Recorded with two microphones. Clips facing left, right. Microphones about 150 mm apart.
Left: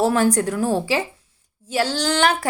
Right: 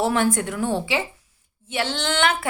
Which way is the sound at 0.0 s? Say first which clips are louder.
Left 3 dB; 40° left (ahead or behind).